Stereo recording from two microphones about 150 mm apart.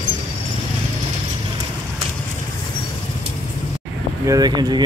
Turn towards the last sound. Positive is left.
turn(degrees=-30)  # may be behind; listen again after turning